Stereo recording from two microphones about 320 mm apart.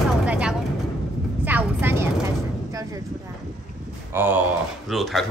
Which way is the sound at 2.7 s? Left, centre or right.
Centre.